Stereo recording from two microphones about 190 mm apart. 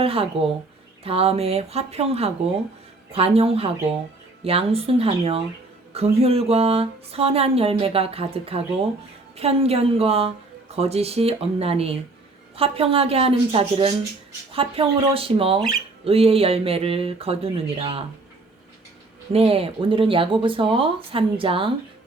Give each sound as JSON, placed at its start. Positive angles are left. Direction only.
{"t": 0.0, "sound": "speech", "side_deg": -30}
{"t": 19.3, "sound": "speech", "side_deg": -30}